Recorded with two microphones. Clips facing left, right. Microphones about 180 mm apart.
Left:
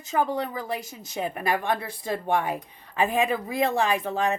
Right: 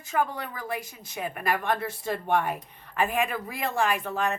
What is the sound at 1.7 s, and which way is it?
A woman's voice, 15° left (ahead or behind).